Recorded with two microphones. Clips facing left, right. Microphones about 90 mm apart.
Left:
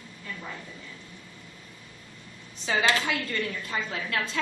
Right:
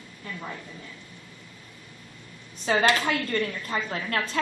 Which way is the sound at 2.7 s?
45° right (ahead or behind).